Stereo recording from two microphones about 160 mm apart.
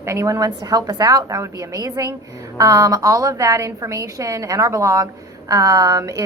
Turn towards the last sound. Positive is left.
turn(degrees=-20)  # may be behind; listen again after turning